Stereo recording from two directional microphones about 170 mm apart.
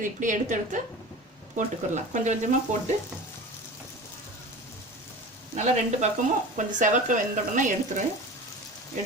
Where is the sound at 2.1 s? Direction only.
45° right (ahead or behind).